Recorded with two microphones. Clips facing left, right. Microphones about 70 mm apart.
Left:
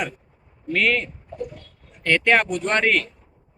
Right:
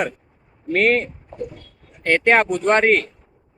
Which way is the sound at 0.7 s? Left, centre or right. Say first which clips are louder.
Right 4 dB; right.